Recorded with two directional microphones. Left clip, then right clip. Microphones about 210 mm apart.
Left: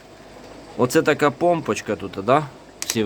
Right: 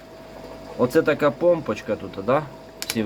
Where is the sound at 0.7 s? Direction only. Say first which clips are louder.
Left 1 dB; 45° left (ahead or behind).